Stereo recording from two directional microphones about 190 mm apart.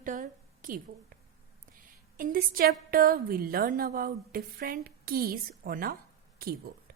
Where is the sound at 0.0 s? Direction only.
45° right (ahead or behind).